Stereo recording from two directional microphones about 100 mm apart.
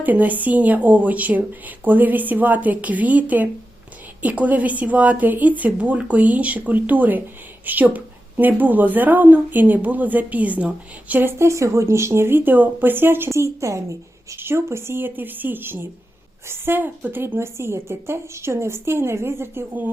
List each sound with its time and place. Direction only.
0.0 s a woman's voice: 15° right (ahead or behind)